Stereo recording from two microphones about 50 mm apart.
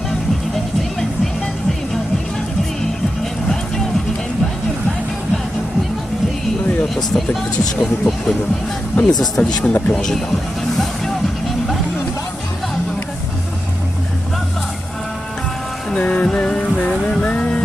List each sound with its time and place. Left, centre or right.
6.8 s vehicle: centre
7.8 s speech: centre
16.0 s music: left